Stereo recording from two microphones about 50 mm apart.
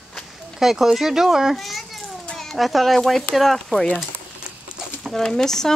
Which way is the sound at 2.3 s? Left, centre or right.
Centre.